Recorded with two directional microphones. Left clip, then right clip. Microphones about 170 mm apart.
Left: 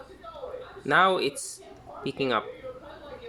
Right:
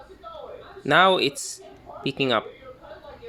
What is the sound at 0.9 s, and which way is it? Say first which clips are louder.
Speech: right 4 dB; 40° right (ahead or behind).